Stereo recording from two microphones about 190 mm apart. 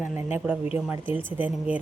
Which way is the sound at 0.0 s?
10° right (ahead or behind).